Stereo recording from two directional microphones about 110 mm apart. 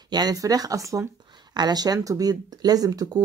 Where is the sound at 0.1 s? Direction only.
35° right (ahead or behind).